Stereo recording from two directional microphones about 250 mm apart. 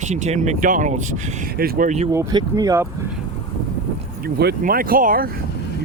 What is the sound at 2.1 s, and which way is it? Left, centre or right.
Speech, centre.